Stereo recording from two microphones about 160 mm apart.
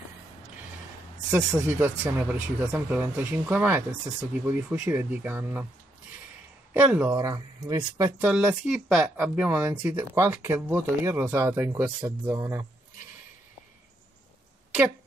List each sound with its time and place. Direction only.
1.3 s speech: 15° right (ahead or behind)
6.7 s speech: 10° right (ahead or behind)
7.2 s speech: 25° right (ahead or behind)
8.2 s speech: 10° right (ahead or behind)